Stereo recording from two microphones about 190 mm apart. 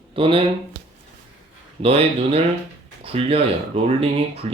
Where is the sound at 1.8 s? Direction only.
30° right (ahead or behind).